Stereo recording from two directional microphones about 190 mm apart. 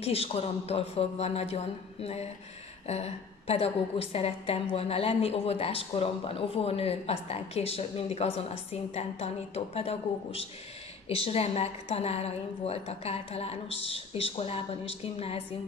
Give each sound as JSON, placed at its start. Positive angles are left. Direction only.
{"t": 0.0, "sound": "a woman's voice", "side_deg": 30}